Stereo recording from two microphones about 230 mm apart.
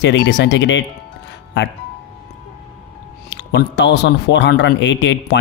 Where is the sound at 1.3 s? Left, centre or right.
Left.